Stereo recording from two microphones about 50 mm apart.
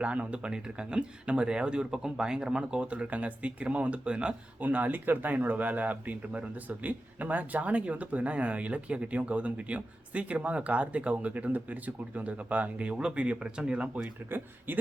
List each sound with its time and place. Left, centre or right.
0.0 s speech: right
4.6 s speech: right
14.0 s speech: right